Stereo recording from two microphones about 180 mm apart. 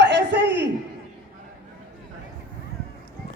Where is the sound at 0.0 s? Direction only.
75° right (ahead or behind).